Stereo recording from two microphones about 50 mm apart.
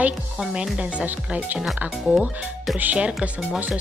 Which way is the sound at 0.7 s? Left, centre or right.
Right.